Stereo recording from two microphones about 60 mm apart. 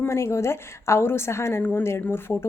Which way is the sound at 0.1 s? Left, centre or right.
Left.